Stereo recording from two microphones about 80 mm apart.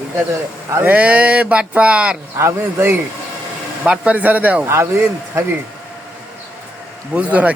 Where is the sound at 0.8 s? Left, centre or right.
Right.